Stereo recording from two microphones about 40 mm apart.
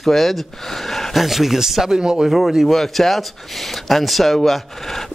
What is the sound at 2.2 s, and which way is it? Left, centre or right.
Speech, centre.